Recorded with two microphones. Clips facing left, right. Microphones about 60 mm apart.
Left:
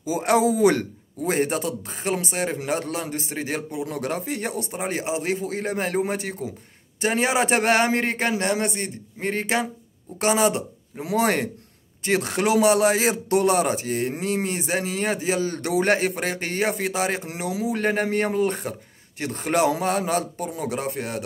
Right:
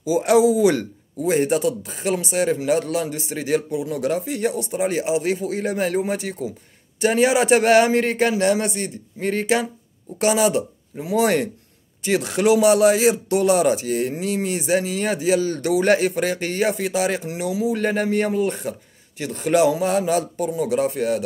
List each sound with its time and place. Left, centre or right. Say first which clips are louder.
0.0 s speech: right 4 dB; left